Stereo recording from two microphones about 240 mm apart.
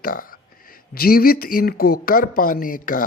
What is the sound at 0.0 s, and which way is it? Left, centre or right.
A man's voice, left.